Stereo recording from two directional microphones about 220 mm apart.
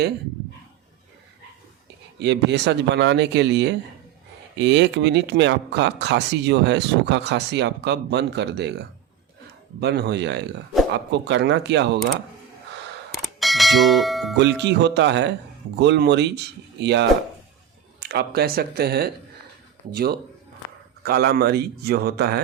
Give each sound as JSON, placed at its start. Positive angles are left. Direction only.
{"t": 2.1, "sound": "speech", "side_deg": -50}
{"t": 9.8, "sound": "speech", "side_deg": -50}
{"t": 13.4, "sound": "speech", "side_deg": 0}
{"t": 14.3, "sound": "speech", "side_deg": -50}
{"t": 18.1, "sound": "speech", "side_deg": -45}
{"t": 21.0, "sound": "speech", "side_deg": -45}